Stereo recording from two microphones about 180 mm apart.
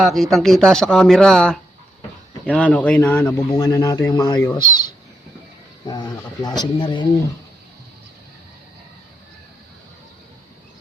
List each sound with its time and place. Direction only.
0.0 s speech: centre (ahead or behind)
2.6 s speech: 10° left (ahead or behind)
5.8 s speech: 25° left (ahead or behind)